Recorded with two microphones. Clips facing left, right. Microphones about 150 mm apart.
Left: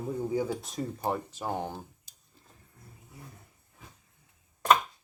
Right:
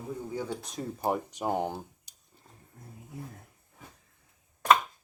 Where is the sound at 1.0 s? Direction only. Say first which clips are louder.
Right 5 dB; 15° right (ahead or behind).